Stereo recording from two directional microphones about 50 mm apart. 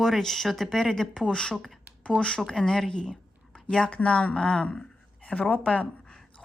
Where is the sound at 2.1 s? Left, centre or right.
Right.